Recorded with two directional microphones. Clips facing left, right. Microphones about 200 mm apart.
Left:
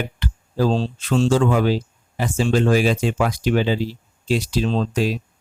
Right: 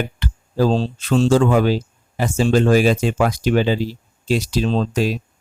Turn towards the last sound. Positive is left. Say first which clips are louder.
# right 2 dB
turn(degrees=-40)  # may be behind; listen again after turning